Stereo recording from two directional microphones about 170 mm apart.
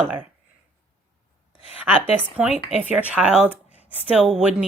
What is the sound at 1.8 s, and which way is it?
Speech, 5° right (ahead or behind).